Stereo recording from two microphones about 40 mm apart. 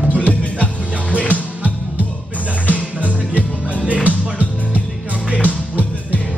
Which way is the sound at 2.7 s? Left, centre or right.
Right.